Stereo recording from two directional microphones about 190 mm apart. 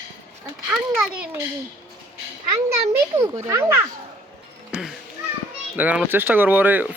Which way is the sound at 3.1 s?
15° right (ahead or behind).